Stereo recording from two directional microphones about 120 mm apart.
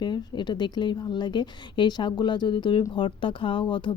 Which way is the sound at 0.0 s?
40° left (ahead or behind).